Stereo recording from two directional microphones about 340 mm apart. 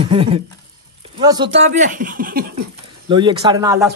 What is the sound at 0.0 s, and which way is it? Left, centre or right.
Speech, centre.